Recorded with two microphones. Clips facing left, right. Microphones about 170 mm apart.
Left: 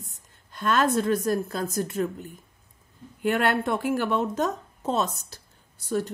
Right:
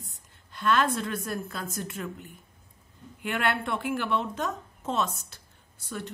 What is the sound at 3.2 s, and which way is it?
Speech, 40° left (ahead or behind).